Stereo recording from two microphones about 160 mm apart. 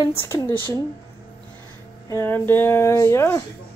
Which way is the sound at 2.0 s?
15° left (ahead or behind).